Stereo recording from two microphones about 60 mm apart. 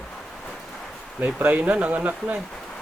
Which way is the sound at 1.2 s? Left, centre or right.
Right.